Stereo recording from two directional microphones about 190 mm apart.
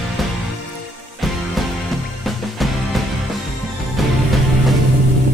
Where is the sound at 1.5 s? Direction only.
Centre (ahead or behind).